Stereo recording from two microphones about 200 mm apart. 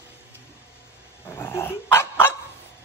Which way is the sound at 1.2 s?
10° left (ahead or behind).